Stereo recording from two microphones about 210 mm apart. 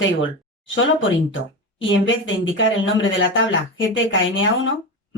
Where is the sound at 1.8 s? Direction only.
65° left (ahead or behind).